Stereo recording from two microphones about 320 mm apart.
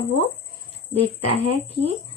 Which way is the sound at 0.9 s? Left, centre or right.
Centre.